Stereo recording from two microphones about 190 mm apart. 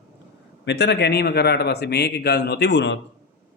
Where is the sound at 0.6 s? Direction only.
65° left (ahead or behind).